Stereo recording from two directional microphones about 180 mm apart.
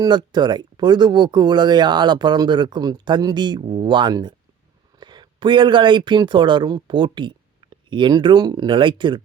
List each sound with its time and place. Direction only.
0.0 s speech: 25° right (ahead or behind)